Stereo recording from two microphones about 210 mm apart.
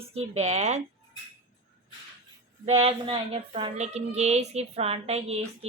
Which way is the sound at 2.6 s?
30° right (ahead or behind).